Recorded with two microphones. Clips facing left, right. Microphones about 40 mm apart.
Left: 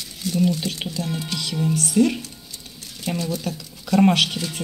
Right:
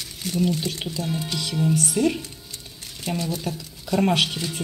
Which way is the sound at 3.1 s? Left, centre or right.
Right.